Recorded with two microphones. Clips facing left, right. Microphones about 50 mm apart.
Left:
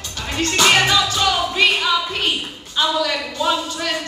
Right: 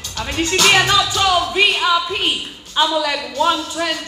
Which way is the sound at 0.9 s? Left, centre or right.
Centre.